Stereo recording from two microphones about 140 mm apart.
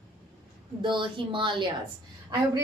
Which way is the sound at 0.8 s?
35° right (ahead or behind).